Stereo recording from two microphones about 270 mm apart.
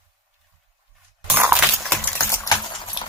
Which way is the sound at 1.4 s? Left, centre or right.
Centre.